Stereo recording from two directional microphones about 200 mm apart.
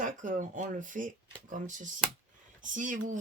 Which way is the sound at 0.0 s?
40° right (ahead or behind).